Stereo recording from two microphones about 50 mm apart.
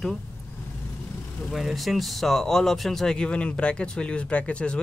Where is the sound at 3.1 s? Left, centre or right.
Centre.